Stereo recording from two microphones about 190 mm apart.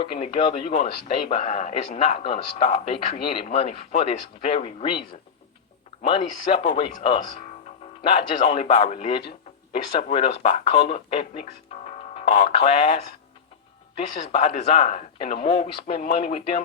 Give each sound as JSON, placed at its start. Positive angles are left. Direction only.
{"t": 0.0, "sound": "speech", "side_deg": 25}
{"t": 1.3, "sound": "speech", "side_deg": 40}
{"t": 1.7, "sound": "speech", "side_deg": 30}
{"t": 6.0, "sound": "speech", "side_deg": 30}
{"t": 14.3, "sound": "speech", "side_deg": 35}